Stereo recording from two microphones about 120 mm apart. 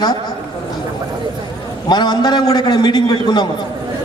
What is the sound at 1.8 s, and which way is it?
A man's voice, 35° left (ahead or behind).